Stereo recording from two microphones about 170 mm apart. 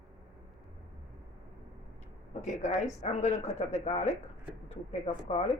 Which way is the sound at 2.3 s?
45° left (ahead or behind).